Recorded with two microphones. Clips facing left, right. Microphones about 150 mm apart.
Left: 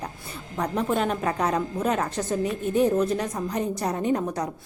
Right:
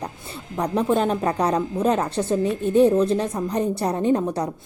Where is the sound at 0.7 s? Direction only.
30° right (ahead or behind).